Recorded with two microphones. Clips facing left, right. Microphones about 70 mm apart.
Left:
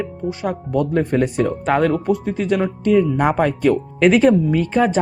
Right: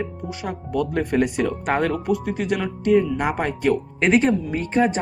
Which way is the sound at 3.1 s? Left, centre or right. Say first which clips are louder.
Left 6 dB; left.